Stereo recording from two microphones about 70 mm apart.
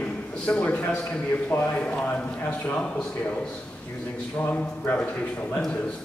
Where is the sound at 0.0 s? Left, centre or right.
Centre.